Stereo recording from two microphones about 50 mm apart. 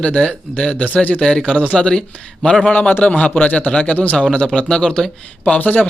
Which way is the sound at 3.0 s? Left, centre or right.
Left.